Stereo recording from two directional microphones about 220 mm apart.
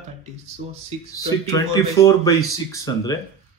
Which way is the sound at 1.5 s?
15° left (ahead or behind).